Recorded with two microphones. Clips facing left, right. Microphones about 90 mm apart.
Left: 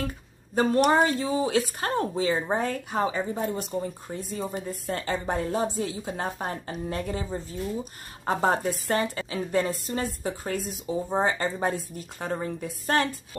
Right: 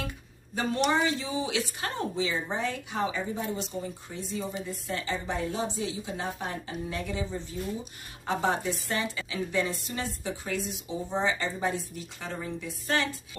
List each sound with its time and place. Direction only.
0.6 s a woman's voice: 45° left (ahead or behind)